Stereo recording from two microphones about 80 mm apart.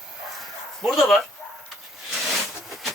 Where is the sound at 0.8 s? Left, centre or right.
Centre.